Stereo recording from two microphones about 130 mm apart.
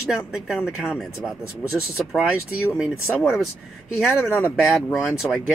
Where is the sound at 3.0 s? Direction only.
15° left (ahead or behind).